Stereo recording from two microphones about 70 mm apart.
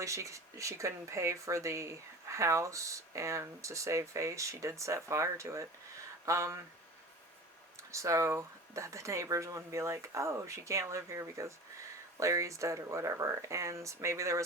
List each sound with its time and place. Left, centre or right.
0.0 s speech: right
7.9 s speech: right